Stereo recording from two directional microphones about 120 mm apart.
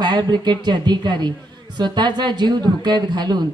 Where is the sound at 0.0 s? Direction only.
40° right (ahead or behind).